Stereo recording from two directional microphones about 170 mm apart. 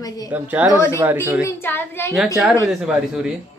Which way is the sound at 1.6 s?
10° left (ahead or behind).